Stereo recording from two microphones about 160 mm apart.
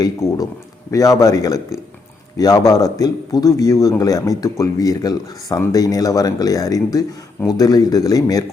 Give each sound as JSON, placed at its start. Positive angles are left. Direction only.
{"t": 0.0, "sound": "a man's voice", "side_deg": 20}